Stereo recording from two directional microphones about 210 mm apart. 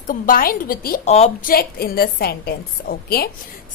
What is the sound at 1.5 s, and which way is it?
A woman's voice, 50° left (ahead or behind).